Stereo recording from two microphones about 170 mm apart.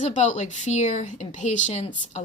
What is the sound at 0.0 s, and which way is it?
A woman's voice, 45° left (ahead or behind).